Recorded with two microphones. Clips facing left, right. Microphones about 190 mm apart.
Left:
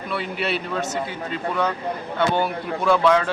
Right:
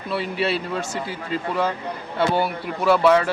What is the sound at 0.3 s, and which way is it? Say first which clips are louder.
Speech: right 3 dB; 30° right (ahead or behind).